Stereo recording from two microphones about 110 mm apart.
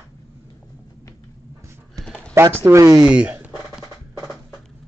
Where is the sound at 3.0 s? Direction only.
10° right (ahead or behind).